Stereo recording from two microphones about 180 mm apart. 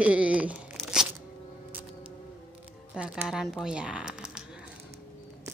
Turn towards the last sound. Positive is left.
turn(degrees=-5)  # may be behind; listen again after turning